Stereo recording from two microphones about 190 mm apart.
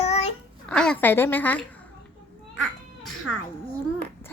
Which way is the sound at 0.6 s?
5° left (ahead or behind).